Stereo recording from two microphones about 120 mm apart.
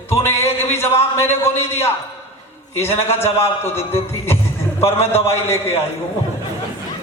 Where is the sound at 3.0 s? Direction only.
20° left (ahead or behind).